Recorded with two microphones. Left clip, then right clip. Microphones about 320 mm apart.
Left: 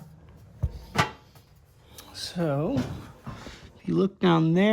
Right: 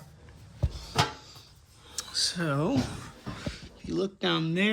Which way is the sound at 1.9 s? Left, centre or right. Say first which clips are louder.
Right 6 dB; centre.